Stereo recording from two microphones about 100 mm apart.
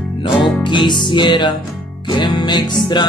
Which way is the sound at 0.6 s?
50° left (ahead or behind).